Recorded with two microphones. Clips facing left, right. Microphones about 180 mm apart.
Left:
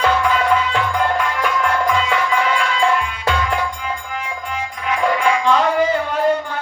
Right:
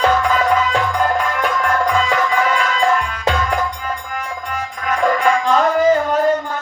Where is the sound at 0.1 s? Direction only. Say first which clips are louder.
Right 1 dB; 40° right (ahead or behind).